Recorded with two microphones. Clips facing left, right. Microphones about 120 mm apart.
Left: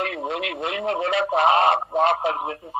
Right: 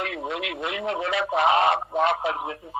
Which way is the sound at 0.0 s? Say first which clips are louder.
Left 3 dB; 35° left (ahead or behind).